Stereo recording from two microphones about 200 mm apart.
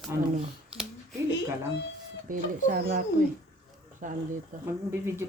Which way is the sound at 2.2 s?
40° right (ahead or behind).